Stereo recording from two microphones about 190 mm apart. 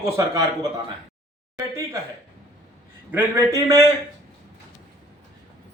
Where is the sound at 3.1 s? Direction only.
10° right (ahead or behind).